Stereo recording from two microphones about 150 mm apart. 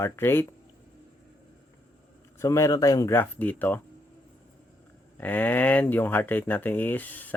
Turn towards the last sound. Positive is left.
turn(degrees=10)  # may be behind; listen again after turning